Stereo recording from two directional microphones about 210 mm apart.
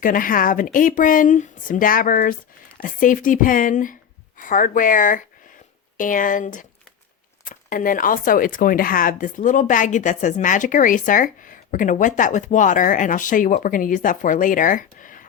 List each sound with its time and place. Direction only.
0.0 s speech: 40° left (ahead or behind)